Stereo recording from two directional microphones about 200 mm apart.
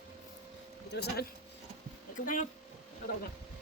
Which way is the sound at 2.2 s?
40° left (ahead or behind).